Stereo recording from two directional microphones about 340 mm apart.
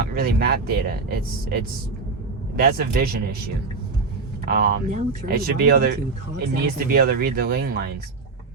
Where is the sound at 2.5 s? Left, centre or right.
Right.